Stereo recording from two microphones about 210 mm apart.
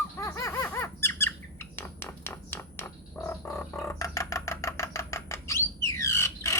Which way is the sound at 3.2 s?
10° left (ahead or behind).